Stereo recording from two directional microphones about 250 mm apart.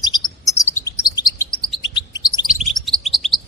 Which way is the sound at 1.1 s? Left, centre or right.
Centre.